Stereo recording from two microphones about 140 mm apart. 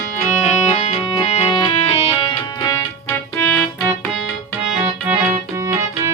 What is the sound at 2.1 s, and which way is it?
Music, 25° left (ahead or behind).